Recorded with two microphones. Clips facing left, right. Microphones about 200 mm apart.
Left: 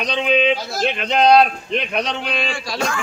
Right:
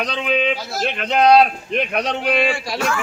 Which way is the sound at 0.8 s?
5° right (ahead or behind).